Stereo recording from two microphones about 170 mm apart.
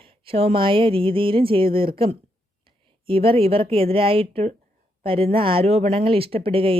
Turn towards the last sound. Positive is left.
turn(degrees=-30)  # may be behind; listen again after turning